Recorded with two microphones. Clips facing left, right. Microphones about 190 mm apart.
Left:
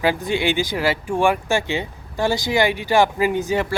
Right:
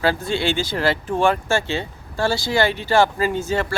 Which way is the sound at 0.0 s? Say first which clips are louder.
Left 1 dB; 15° left (ahead or behind).